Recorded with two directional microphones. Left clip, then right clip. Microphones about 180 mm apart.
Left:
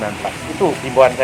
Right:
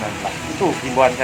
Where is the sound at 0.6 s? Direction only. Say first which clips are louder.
Left 3 dB; 50° left (ahead or behind).